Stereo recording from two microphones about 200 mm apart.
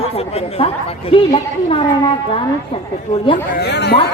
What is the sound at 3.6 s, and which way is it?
Speech, 55° left (ahead or behind).